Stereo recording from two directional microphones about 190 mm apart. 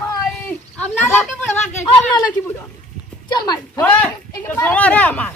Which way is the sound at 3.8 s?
10° left (ahead or behind).